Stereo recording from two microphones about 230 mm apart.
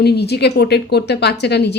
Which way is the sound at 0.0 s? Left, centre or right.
Left.